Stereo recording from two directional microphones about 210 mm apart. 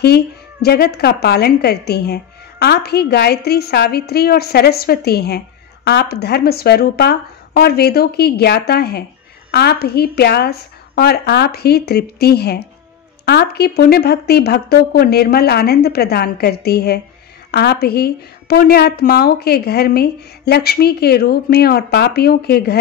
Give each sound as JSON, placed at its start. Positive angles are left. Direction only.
{"t": 0.0, "sound": "a woman's voice", "side_deg": 50}